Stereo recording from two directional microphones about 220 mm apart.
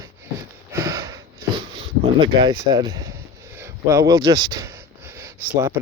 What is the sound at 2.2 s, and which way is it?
Speech, 20° right (ahead or behind).